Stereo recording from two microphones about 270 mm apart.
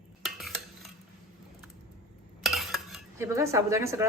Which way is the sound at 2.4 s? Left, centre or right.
Centre.